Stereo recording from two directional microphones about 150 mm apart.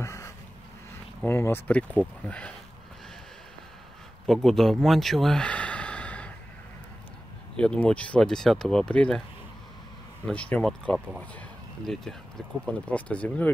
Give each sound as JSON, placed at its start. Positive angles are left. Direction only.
{"t": 0.0, "sound": "a sound", "side_deg": 20}
{"t": 1.2, "sound": "speech", "side_deg": 15}
{"t": 4.3, "sound": "speech", "side_deg": 0}
{"t": 7.5, "sound": "speech", "side_deg": 5}
{"t": 10.2, "sound": "speech", "side_deg": 5}